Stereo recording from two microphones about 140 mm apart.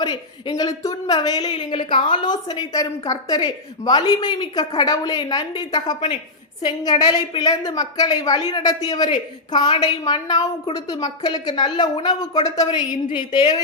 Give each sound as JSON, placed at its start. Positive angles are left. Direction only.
{"t": 0.0, "sound": "a woman's voice", "side_deg": 30}